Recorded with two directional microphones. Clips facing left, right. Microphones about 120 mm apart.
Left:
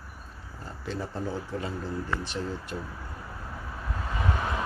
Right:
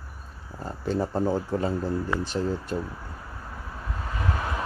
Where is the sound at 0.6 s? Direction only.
40° right (ahead or behind).